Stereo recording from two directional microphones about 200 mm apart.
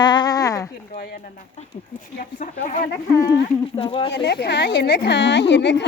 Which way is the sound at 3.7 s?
25° left (ahead or behind).